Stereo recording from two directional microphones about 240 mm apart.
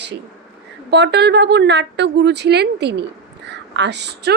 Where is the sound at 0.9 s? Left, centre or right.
Right.